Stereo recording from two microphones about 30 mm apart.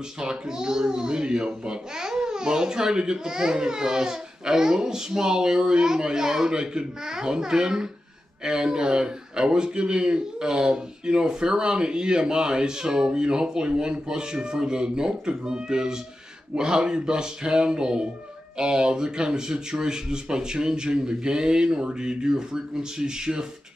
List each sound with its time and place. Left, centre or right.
0.2 s speech: right